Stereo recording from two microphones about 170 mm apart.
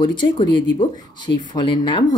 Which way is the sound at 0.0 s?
25° left (ahead or behind).